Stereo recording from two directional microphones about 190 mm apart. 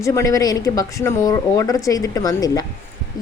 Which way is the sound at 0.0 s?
15° left (ahead or behind).